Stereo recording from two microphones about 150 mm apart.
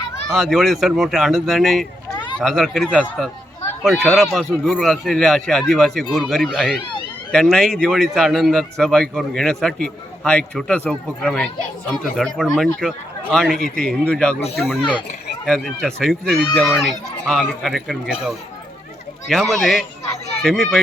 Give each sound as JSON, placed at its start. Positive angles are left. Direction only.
{"t": 0.3, "sound": "a man's voice", "side_deg": 0}
{"t": 2.1, "sound": "a sound", "side_deg": 30}
{"t": 2.4, "sound": "a man's voice", "side_deg": 0}